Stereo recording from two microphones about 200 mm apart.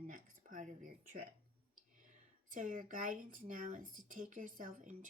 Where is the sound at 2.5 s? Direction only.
40° right (ahead or behind).